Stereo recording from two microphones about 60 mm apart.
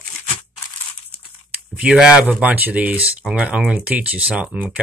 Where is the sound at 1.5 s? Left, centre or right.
Right.